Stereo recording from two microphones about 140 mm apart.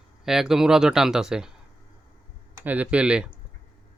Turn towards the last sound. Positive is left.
turn(degrees=-5)  # may be behind; listen again after turning